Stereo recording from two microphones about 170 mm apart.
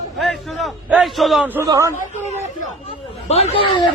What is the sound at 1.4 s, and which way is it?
Speech, 15° right (ahead or behind).